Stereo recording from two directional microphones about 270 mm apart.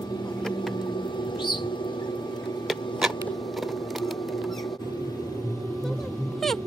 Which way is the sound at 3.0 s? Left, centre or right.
Centre.